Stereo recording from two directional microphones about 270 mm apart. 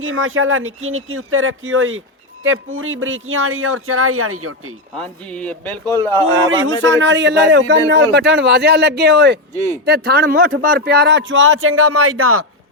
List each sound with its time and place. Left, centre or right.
0.0 s speech: right
4.9 s speech: centre
6.5 s speech: right